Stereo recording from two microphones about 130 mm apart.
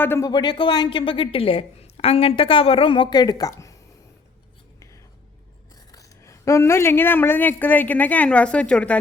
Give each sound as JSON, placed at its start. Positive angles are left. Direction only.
{"t": 0.0, "sound": "speech", "side_deg": 20}
{"t": 0.3, "sound": "a woman's voice", "side_deg": 35}
{"t": 5.9, "sound": "a woman's voice", "side_deg": 25}